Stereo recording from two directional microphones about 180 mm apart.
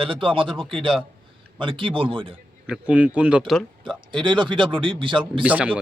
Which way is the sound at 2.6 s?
5° right (ahead or behind).